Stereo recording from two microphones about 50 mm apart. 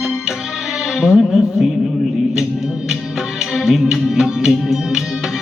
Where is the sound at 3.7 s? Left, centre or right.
Centre.